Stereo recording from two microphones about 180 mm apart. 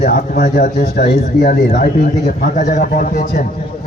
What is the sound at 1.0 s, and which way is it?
A man's voice, 65° left (ahead or behind).